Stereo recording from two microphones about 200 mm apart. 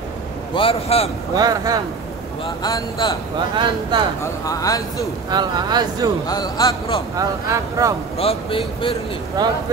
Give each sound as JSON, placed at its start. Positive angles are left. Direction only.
{"t": 0.6, "sound": "speech", "side_deg": 30}
{"t": 1.3, "sound": "speech", "side_deg": -20}
{"t": 2.4, "sound": "speech", "side_deg": 20}
{"t": 3.5, "sound": "speech", "side_deg": -25}
{"t": 4.2, "sound": "speech", "side_deg": 15}
{"t": 5.3, "sound": "speech", "side_deg": -20}
{"t": 6.2, "sound": "speech", "side_deg": 20}
{"t": 7.2, "sound": "speech", "side_deg": -15}
{"t": 8.2, "sound": "speech", "side_deg": 30}
{"t": 9.4, "sound": "speech", "side_deg": -20}